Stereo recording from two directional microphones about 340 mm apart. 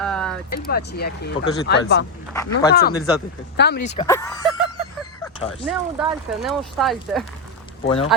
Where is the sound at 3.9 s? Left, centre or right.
Centre.